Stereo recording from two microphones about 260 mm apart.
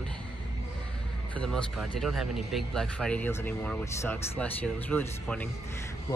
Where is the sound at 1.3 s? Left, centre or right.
Centre.